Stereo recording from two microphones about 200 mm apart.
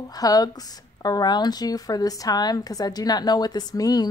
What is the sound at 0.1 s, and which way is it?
Speech, 20° left (ahead or behind).